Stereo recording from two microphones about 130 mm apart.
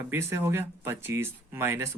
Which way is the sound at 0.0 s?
20° right (ahead or behind).